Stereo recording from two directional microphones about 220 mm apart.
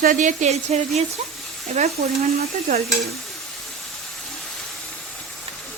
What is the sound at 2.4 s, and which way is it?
Speech, 30° right (ahead or behind).